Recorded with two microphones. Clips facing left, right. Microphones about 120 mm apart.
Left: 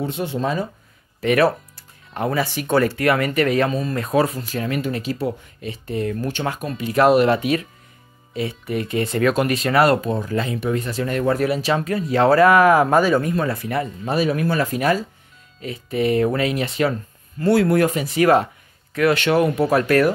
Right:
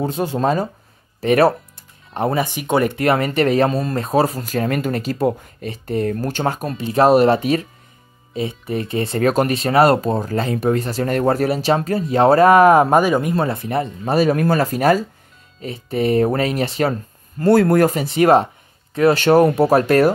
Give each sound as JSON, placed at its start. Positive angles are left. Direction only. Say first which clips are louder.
{"t": 0.0, "sound": "speech", "louder": "right 4 dB", "side_deg": -40}
{"t": 1.2, "sound": "speech", "louder": "right 3 dB", "side_deg": -30}
{"t": 13.0, "sound": "speech", "louder": "right 1 dB", "side_deg": -15}
{"t": 13.3, "sound": "speech", "louder": "right 2 dB", "side_deg": -30}
{"t": 14.1, "sound": "speech", "louder": "right 4 dB", "side_deg": -45}